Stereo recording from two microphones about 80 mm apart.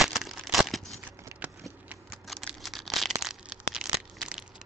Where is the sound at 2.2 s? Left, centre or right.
Centre.